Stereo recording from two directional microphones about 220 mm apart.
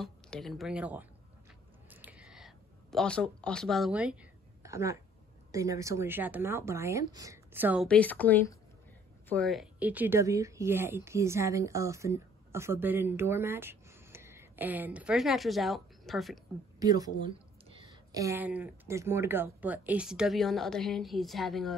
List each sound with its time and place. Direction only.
0.0 s speech: centre (ahead or behind)
1.9 s a sound: 5° right (ahead or behind)
5.5 s speech: 15° right (ahead or behind)
7.9 s a woman's voice: 5° left (ahead or behind)
16.8 s speech: 15° right (ahead or behind); by 21.7 s centre (ahead or behind)